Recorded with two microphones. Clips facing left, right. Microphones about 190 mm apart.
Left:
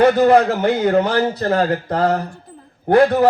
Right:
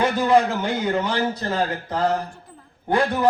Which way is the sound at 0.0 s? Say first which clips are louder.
Left 6 dB; 60° left (ahead or behind).